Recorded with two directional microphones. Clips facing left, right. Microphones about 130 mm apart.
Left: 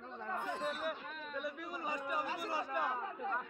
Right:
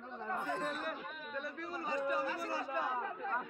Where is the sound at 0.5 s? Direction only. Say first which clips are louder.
Even; 10° left (ahead or behind).